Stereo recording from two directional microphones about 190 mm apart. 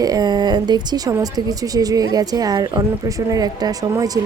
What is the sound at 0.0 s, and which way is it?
A woman's voice, 20° right (ahead or behind).